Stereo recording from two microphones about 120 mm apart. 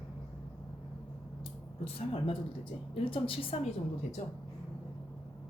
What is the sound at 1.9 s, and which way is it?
A woman's voice, 50° left (ahead or behind).